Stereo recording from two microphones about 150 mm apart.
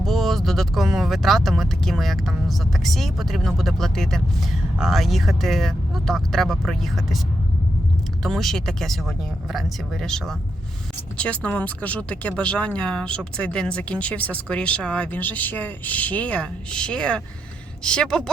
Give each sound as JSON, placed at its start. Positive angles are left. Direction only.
{"t": 0.0, "sound": "speech", "side_deg": 0}
{"t": 8.2, "sound": "speech", "side_deg": 0}